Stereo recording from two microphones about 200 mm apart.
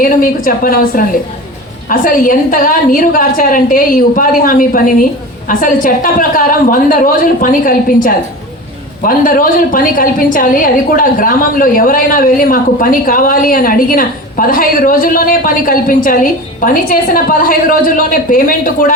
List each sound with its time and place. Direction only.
0.0 s a woman's voice: 45° left (ahead or behind)